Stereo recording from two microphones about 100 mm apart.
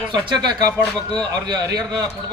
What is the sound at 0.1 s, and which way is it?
A man's voice, 45° right (ahead or behind).